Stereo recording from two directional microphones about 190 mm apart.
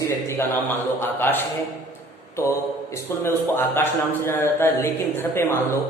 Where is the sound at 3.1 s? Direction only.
15° left (ahead or behind).